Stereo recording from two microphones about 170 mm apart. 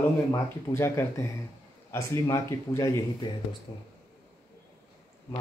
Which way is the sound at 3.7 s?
30° left (ahead or behind).